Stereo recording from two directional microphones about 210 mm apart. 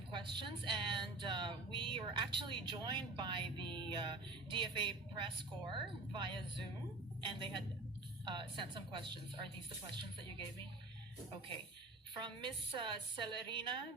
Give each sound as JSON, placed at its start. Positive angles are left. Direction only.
{"t": 0.3, "sound": "speech", "side_deg": -20}
{"t": 12.2, "sound": "speech", "side_deg": -20}